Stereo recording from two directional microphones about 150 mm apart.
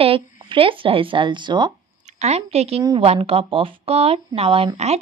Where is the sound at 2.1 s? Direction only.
45° right (ahead or behind).